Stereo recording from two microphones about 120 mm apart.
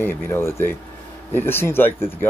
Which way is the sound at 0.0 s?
20° left (ahead or behind).